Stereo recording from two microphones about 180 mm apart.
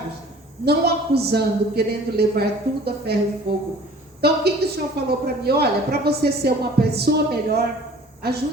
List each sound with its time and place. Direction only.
0.6 s a woman's voice: 65° right (ahead or behind)
4.2 s a woman's voice: 60° right (ahead or behind)